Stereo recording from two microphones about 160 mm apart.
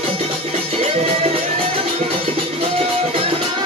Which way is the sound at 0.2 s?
40° right (ahead or behind).